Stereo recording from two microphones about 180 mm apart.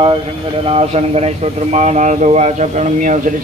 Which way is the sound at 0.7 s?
35° right (ahead or behind).